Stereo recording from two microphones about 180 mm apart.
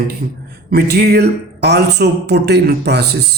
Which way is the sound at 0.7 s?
60° right (ahead or behind).